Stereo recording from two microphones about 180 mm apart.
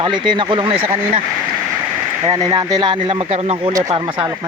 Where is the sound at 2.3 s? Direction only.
20° right (ahead or behind).